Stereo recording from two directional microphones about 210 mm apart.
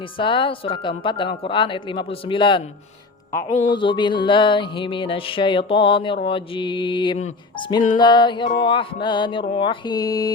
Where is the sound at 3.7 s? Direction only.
20° left (ahead or behind).